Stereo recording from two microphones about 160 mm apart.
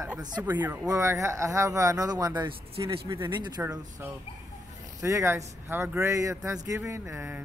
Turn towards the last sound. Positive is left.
turn(degrees=-20)  # may be behind; listen again after turning